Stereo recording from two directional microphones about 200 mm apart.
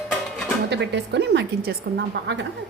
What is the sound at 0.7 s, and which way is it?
A woman's voice, 60° right (ahead or behind).